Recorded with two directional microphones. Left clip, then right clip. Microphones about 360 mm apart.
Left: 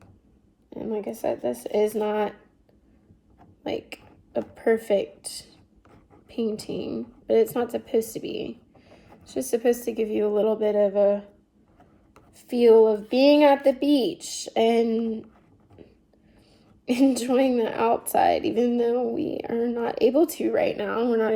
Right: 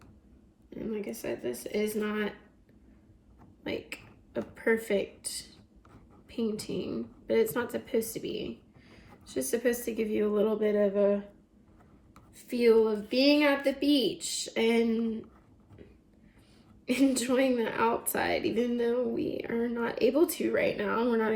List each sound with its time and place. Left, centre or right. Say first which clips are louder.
0.7 s a sound: left 6 dB; centre
1.5 s speech: left 6 dB; left
1.8 s a woman's voice: left 9 dB; centre
3.6 s a woman's voice: left 5 dB; centre
12.1 s a sound: left 7 dB; centre
13.1 s a woman's voice: left 7 dB; centre
16.8 s a woman's voice: left 5 dB; centre